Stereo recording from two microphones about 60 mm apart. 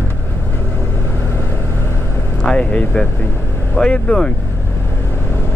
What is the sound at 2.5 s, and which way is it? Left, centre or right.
Speech, centre.